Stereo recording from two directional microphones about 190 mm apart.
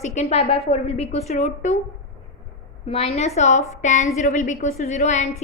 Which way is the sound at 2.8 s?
30° left (ahead or behind).